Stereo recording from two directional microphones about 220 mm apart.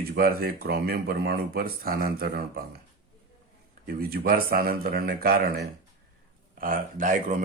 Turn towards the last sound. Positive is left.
turn(degrees=-35)  # may be behind; listen again after turning